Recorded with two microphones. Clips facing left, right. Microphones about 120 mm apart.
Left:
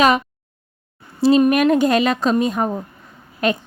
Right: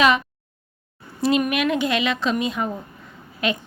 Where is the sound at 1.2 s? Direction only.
30° left (ahead or behind).